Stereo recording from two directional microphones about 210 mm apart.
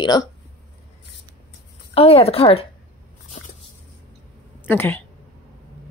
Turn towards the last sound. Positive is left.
turn(degrees=10)  # may be behind; listen again after turning